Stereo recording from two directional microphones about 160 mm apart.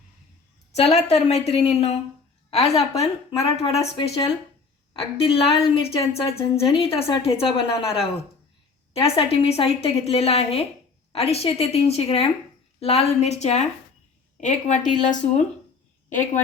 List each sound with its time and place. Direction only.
0.7 s a woman's voice: 45° left (ahead or behind)
4.9 s a woman's voice: 35° left (ahead or behind); by 16.4 s 50° left (ahead or behind)